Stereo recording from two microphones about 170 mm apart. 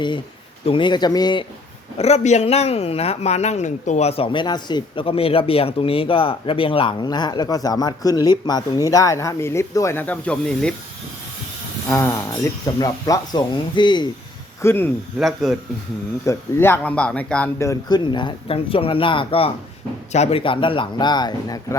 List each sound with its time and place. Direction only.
0.6 s speech: 30° left (ahead or behind)
2.0 s speech: 40° left (ahead or behind); by 10.8 s 5° left (ahead or behind)
11.9 s a man's voice: 15° left (ahead or behind)
14.6 s a man's voice: 15° left (ahead or behind)
15.2 s speech: centre (ahead or behind)
16.2 s a man's voice: 15° left (ahead or behind)
17.6 s speech: 20° left (ahead or behind)